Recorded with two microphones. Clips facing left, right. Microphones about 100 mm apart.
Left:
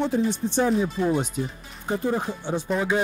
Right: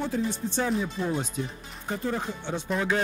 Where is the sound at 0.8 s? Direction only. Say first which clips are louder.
Left 6 dB; 20° left (ahead or behind).